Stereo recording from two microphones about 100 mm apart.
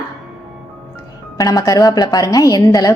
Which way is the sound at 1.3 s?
35° left (ahead or behind).